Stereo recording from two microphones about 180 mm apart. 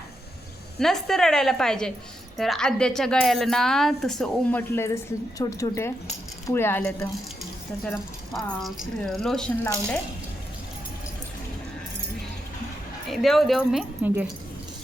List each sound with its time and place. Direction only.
0.8 s speech: centre (ahead or behind)
4.7 s speech: 15° left (ahead or behind)
7.9 s speech: centre (ahead or behind)
13.1 s speech: centre (ahead or behind)